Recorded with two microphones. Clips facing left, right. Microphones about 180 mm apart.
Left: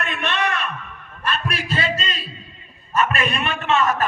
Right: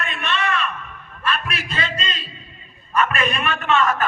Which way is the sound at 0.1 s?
60° left (ahead or behind).